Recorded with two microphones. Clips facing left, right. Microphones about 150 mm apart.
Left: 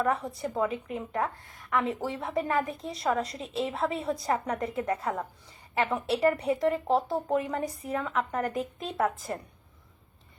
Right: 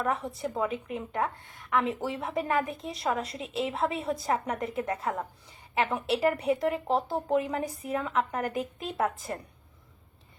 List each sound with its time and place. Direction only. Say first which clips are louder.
0.0 s a woman's voice: left 2 dB; centre (ahead or behind)